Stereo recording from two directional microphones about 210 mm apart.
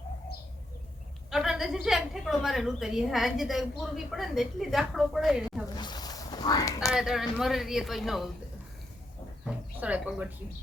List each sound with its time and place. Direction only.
1.3 s a woman's voice: centre (ahead or behind)
5.6 s a sound: 20° left (ahead or behind)
6.9 s a woman's voice: 5° right (ahead or behind)
9.5 s speech: 5° right (ahead or behind)